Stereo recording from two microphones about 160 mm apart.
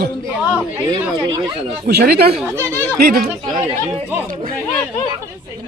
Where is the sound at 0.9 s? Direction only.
30° right (ahead or behind).